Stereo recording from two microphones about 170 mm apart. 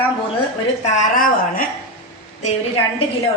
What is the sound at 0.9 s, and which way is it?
Speech, 55° left (ahead or behind).